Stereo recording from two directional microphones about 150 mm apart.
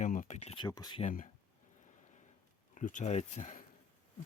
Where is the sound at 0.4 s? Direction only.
35° left (ahead or behind).